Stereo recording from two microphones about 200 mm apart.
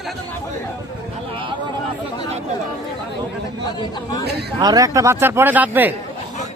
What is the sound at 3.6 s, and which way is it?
Speech, 20° left (ahead or behind).